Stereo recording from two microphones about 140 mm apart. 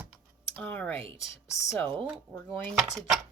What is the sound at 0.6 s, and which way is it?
Speech, 10° left (ahead or behind).